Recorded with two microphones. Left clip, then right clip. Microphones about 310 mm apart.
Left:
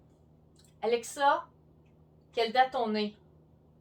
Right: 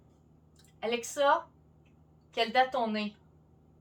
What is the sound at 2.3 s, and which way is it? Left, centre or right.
Speech, centre.